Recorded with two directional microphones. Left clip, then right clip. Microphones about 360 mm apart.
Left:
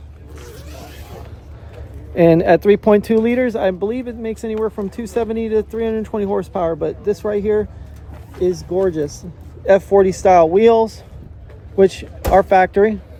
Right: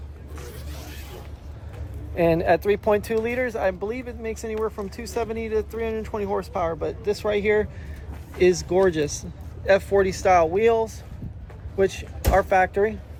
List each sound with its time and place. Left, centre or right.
0.3 s a sound: centre
2.1 s speech: left
8.4 s speech: centre
9.6 s speech: centre
11.8 s speech: centre